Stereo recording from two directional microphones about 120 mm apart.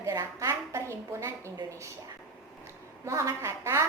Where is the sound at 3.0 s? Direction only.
25° right (ahead or behind).